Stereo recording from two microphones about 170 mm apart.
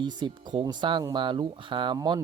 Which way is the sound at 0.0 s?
25° right (ahead or behind).